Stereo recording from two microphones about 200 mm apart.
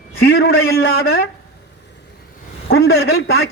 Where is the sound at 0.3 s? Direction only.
90° left.